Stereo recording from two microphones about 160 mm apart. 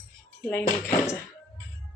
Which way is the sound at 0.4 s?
10° left (ahead or behind).